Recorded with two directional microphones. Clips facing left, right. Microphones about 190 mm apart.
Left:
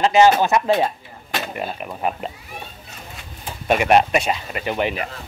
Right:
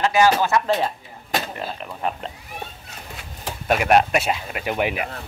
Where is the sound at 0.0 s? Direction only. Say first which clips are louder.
Left 3 dB; 20° left (ahead or behind).